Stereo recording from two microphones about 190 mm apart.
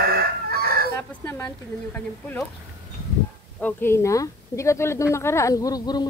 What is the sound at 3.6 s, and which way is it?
A woman's voice, 15° left (ahead or behind).